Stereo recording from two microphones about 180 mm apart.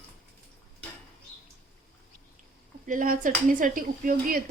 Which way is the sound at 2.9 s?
50° right (ahead or behind).